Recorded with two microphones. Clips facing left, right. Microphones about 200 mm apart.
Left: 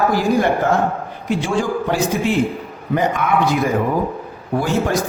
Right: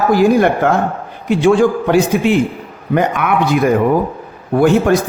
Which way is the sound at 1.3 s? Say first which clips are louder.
Right 8 dB; 65° right (ahead or behind).